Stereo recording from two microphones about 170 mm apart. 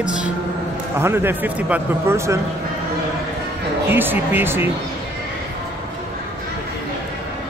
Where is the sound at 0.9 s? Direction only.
15° right (ahead or behind).